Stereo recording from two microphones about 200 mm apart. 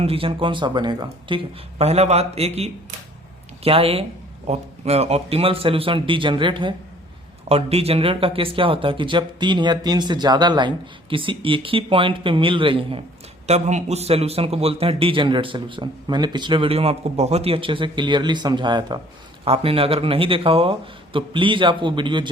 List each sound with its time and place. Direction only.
0.0 s speech: 30° right (ahead or behind)
3.6 s speech: 30° right (ahead or behind)